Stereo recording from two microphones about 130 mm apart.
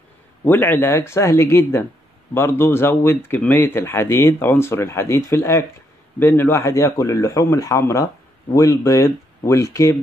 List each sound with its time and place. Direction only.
0.5 s speech: 15° left (ahead or behind)